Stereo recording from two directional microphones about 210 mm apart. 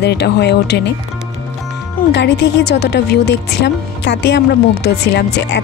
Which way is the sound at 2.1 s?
55° left (ahead or behind).